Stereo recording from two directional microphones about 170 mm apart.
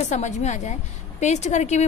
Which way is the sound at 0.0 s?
45° left (ahead or behind).